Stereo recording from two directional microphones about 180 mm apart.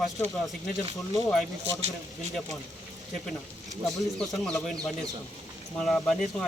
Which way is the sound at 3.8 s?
Centre (ahead or behind).